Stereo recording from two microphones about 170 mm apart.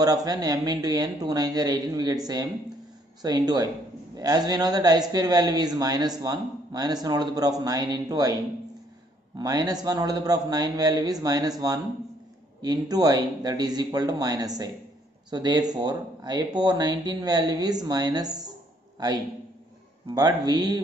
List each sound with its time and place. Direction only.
0.0 s a man's voice: 20° right (ahead or behind)
9.4 s a man's voice: 20° right (ahead or behind)